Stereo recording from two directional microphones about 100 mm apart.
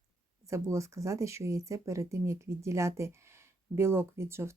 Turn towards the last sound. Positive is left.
turn(degrees=-25)  # may be behind; listen again after turning